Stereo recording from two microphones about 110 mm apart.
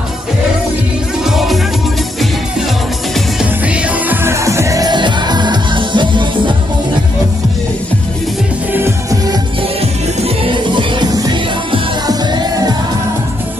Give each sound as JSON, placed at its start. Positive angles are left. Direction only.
{"t": 1.2, "sound": "music", "side_deg": 0}
{"t": 3.6, "sound": "music", "side_deg": -10}
{"t": 8.7, "sound": "music", "side_deg": -25}
{"t": 10.2, "sound": "music", "side_deg": -50}